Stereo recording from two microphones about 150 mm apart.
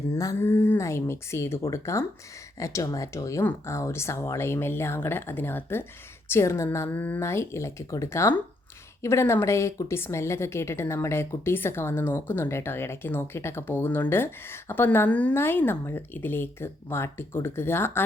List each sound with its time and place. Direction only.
0.1 s a woman's voice: 20° left (ahead or behind)